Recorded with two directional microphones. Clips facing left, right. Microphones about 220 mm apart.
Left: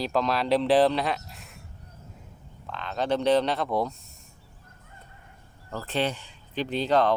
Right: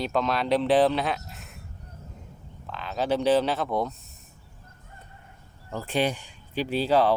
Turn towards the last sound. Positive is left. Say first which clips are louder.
# right 1 dB
turn(degrees=-5)  # may be behind; listen again after turning